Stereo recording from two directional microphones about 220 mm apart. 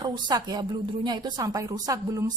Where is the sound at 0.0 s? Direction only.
20° right (ahead or behind).